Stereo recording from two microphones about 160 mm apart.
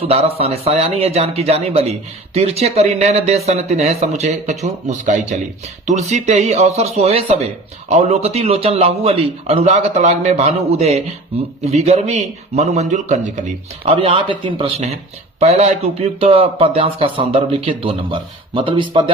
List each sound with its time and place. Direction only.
0.0 s a man's voice: 40° right (ahead or behind)
13.8 s speech: 35° right (ahead or behind)